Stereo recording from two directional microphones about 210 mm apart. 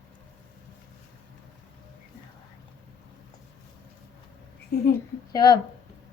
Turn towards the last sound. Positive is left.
turn(degrees=20)  # may be behind; listen again after turning